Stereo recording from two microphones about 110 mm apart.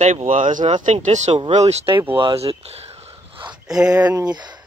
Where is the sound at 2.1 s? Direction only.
55° right (ahead or behind).